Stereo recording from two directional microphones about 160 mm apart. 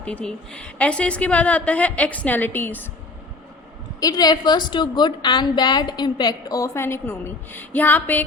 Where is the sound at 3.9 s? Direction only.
25° left (ahead or behind).